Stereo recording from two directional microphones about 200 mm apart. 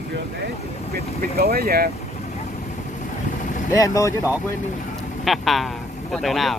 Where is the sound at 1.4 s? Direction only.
50° right (ahead or behind).